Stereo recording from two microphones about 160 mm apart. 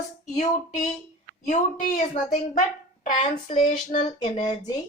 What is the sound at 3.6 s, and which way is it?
Speech, 50° left (ahead or behind).